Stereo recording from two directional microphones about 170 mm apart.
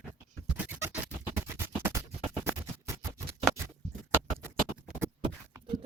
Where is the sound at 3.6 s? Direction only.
15° right (ahead or behind).